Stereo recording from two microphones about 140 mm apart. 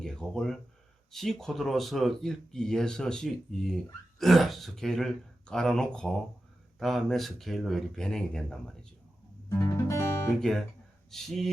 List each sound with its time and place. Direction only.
0.0 s speech: 5° left (ahead or behind)
9.5 s guitar: 20° left (ahead or behind)
10.4 s speech: 5° left (ahead or behind)